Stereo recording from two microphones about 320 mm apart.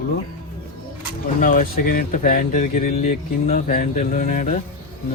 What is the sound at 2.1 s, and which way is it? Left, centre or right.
Speech, left.